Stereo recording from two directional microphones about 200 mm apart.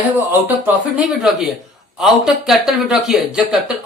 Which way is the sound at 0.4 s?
5° right (ahead or behind).